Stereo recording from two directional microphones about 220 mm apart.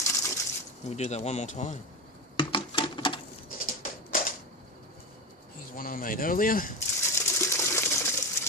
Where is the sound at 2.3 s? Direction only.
25° left (ahead or behind).